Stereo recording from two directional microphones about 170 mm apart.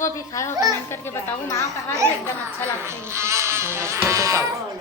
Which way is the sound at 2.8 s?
15° right (ahead or behind).